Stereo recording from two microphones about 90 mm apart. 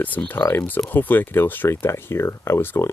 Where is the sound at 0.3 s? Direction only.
25° left (ahead or behind).